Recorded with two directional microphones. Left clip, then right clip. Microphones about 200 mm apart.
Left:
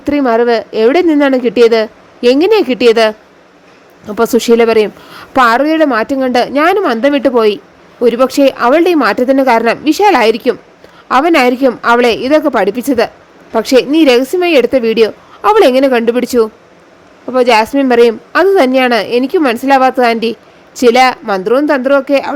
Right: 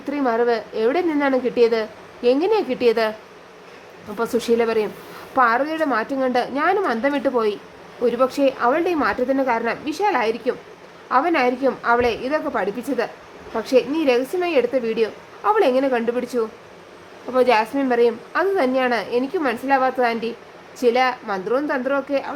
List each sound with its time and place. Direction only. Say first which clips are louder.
0.0 s a woman's voice: left 10 dB; 40° left (ahead or behind)